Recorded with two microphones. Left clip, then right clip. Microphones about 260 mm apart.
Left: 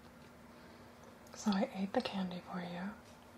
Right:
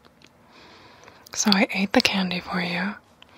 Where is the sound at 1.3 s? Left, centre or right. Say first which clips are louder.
Right 17 dB; right.